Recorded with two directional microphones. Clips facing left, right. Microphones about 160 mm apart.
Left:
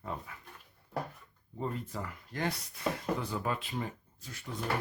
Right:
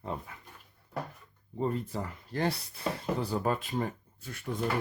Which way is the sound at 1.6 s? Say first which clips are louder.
Right 5 dB; 30° right (ahead or behind).